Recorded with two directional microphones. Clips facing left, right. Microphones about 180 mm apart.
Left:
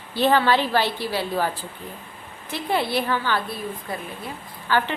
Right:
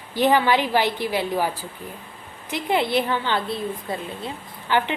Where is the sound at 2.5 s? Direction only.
20° right (ahead or behind).